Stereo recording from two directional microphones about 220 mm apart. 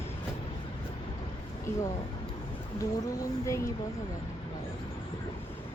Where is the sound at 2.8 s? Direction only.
15° left (ahead or behind).